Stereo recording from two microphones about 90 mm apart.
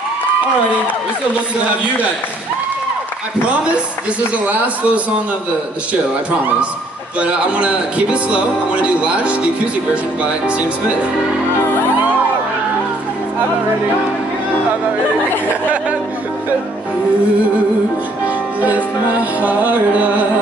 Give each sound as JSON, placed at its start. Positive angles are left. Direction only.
{"t": 4.5, "sound": "speech", "side_deg": -15}
{"t": 7.2, "sound": "speech", "side_deg": -10}
{"t": 10.2, "sound": "speech", "side_deg": -15}
{"t": 18.2, "sound": "music", "side_deg": -20}